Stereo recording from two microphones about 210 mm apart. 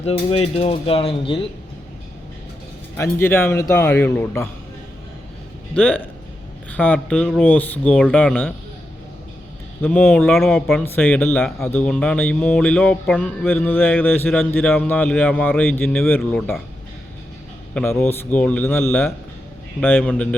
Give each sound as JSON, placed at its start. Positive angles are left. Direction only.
{"t": 0.0, "sound": "speech", "side_deg": 30}
{"t": 3.0, "sound": "speech", "side_deg": 10}
{"t": 5.7, "sound": "speech", "side_deg": 5}
{"t": 9.8, "sound": "speech", "side_deg": 5}
{"t": 17.7, "sound": "speech", "side_deg": 10}